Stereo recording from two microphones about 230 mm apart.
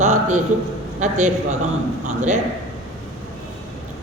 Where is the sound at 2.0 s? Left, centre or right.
Right.